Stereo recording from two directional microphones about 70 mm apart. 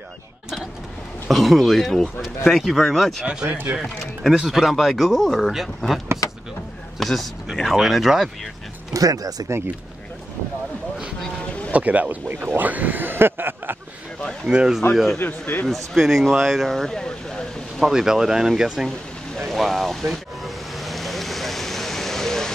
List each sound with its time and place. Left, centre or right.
1.3 s speech: centre
3.4 s speech: right
3.8 s speech: centre
7.0 s a man's voice: centre
8.9 s speech: right
11.7 s speech: right
14.4 s speech: centre
15.1 s speech: left
15.6 s speech: centre
17.8 s speech: centre
18.9 s a sound: centre